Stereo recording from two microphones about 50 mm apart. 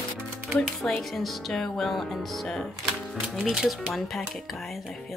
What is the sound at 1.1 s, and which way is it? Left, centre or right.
Music, centre.